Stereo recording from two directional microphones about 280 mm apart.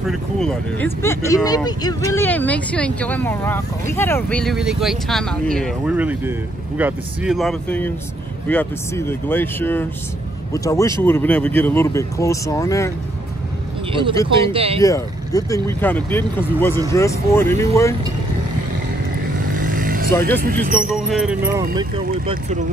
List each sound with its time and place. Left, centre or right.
0.1 s speech: centre
13.9 s speech: centre
14.8 s speech: centre
19.5 s vehicle: right
20.4 s speech: right
20.9 s speech: centre
22.1 s speech: centre